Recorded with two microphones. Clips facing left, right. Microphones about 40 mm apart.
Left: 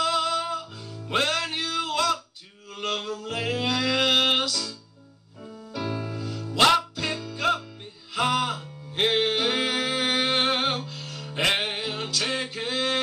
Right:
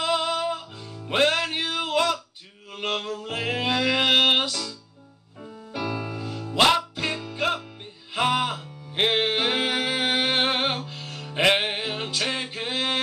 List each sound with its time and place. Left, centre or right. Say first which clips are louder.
0.0 s music: even; right
2.7 s a sound: right 1 dB; right
5.7 s music: right 1 dB; right